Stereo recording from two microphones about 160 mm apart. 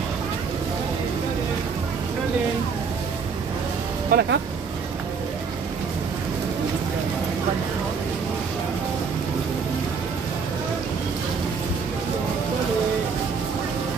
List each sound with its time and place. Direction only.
4.1 s speech: 90° right